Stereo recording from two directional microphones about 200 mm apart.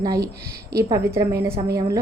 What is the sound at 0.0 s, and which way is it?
A woman's voice, 20° right (ahead or behind).